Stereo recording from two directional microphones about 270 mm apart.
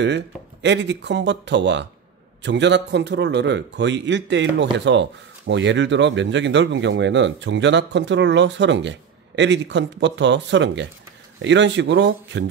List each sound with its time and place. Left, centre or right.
0.0 s speech: right